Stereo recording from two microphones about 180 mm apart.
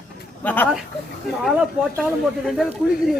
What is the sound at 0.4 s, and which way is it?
Speech, 10° left (ahead or behind).